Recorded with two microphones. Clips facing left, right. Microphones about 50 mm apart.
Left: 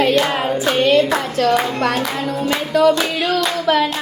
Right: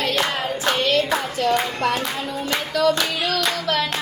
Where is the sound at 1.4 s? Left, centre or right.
Left.